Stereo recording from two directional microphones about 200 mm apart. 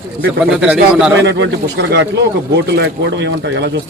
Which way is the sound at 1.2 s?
60° right (ahead or behind).